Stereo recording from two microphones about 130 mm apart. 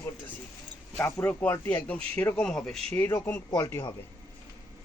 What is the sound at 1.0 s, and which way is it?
Speech, 15° left (ahead or behind).